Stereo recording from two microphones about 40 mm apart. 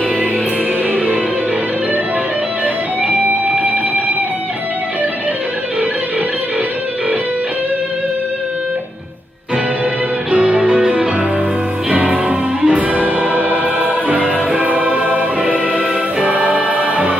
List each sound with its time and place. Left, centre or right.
0.9 s music: right
10.3 s music: right
12.3 s music: right